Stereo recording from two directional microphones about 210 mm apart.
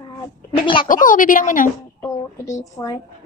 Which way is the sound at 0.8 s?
40° left (ahead or behind).